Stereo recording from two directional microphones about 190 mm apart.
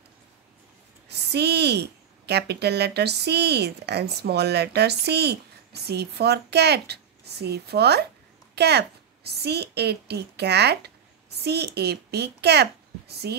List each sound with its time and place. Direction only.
1.0 s a woman's voice: 60° right (ahead or behind)